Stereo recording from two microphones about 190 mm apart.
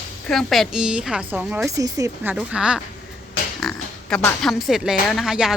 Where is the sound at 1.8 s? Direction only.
15° right (ahead or behind).